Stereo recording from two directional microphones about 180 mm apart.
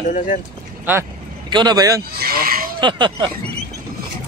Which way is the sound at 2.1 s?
55° right (ahead or behind).